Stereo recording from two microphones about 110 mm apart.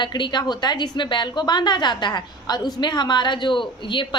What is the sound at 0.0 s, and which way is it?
A woman's voice, 45° left (ahead or behind).